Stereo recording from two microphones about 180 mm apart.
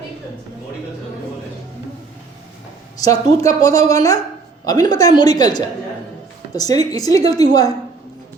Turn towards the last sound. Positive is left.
turn(degrees=20)  # may be behind; listen again after turning